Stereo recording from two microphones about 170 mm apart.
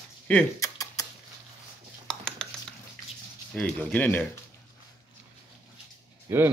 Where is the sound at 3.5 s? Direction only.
5° left (ahead or behind).